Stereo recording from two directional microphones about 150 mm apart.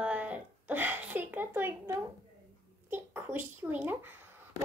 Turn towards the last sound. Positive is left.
turn(degrees=-15)  # may be behind; listen again after turning